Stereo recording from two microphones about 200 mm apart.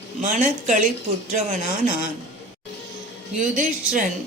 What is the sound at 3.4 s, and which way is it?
Speech, 40° right (ahead or behind).